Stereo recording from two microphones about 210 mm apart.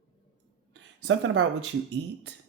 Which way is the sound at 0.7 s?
65° right (ahead or behind).